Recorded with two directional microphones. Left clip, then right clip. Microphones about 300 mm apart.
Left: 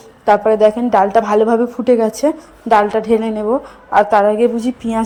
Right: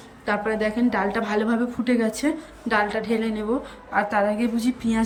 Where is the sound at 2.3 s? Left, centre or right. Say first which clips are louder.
Left 11 dB; left.